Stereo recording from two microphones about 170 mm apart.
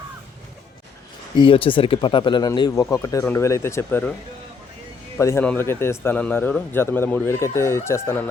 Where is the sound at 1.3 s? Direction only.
30° left (ahead or behind); by 4.1 s 10° left (ahead or behind).